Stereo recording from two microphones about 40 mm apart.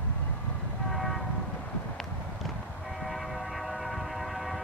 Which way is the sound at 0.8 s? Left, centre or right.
Centre.